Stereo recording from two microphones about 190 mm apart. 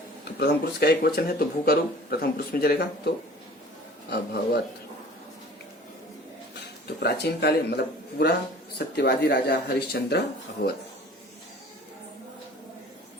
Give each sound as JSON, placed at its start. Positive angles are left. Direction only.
{"t": 0.3, "sound": "speech", "side_deg": 60}
{"t": 4.1, "sound": "speech", "side_deg": 60}
{"t": 7.0, "sound": "speech", "side_deg": 60}